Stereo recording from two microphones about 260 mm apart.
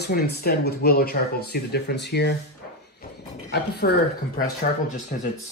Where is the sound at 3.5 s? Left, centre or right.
Left.